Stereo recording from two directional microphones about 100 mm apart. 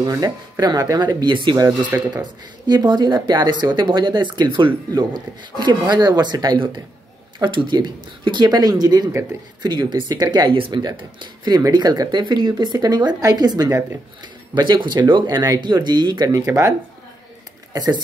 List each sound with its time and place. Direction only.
0.0 s speech: 40° right (ahead or behind)
1.9 s speech: 25° right (ahead or behind)
2.6 s speech: 45° right (ahead or behind)
10.5 s speech: 60° right (ahead or behind)
10.8 s speech: 45° right (ahead or behind)
17.7 s speech: 40° right (ahead or behind)